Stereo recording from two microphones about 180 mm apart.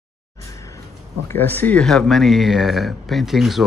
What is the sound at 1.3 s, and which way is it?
Speech, 10° left (ahead or behind).